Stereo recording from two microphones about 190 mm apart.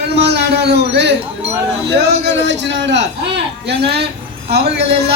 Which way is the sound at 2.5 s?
65° right (ahead or behind).